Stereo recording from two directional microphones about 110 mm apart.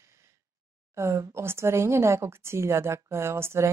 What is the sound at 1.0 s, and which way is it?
Speech, 25° right (ahead or behind).